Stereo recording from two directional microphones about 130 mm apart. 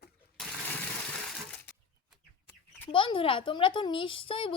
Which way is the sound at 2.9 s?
40° left (ahead or behind).